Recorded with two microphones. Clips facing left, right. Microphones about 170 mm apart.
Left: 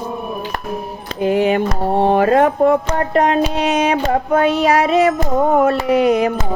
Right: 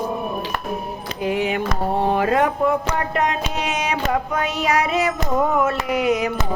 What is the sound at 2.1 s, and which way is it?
Music, 45° left (ahead or behind).